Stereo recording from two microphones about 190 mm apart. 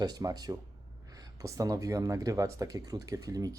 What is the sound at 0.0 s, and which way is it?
Speech, 20° right (ahead or behind).